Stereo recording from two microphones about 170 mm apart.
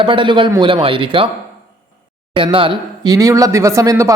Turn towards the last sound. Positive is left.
turn(degrees=-20)  # may be behind; listen again after turning